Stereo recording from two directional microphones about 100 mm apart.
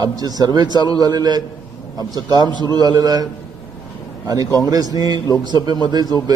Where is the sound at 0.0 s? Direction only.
40° right (ahead or behind).